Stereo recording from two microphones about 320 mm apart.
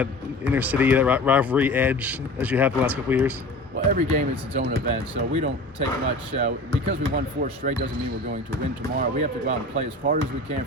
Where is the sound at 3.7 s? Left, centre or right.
Right.